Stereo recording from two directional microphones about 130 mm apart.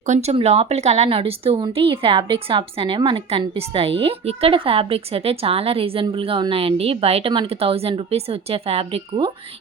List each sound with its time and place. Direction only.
0.1 s speech: 55° right (ahead or behind)